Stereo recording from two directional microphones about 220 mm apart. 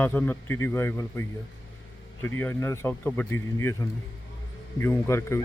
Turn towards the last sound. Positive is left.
turn(degrees=10)  # may be behind; listen again after turning